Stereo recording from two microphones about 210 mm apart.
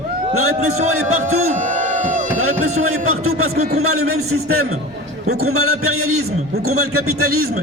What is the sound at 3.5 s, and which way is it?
Speech, 30° right (ahead or behind).